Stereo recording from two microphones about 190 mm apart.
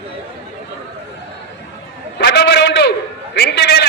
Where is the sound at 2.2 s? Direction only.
60° left (ahead or behind).